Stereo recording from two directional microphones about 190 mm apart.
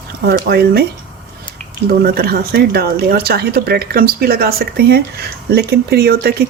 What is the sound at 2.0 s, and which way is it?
Speech, 55° right (ahead or behind).